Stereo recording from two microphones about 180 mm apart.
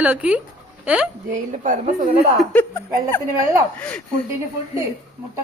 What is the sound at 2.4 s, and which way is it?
Speech, 5° left (ahead or behind).